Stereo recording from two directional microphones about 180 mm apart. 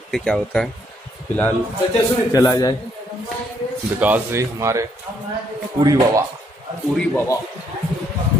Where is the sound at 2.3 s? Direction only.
20° left (ahead or behind).